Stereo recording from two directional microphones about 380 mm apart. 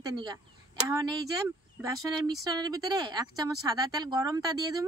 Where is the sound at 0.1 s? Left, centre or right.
Centre.